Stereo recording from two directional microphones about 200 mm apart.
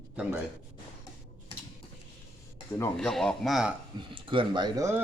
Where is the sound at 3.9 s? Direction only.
25° right (ahead or behind).